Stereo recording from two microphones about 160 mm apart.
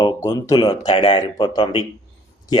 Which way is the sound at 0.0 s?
25° left (ahead or behind).